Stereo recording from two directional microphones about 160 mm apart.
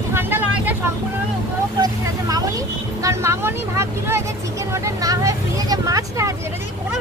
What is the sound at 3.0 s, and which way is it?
Speech, 20° right (ahead or behind).